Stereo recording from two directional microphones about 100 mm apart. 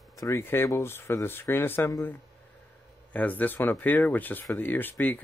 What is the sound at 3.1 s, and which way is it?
Speech, 15° left (ahead or behind).